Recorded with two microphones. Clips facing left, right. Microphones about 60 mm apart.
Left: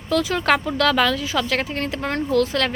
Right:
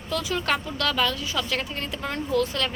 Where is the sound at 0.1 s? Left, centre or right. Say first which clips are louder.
Left 7 dB; left.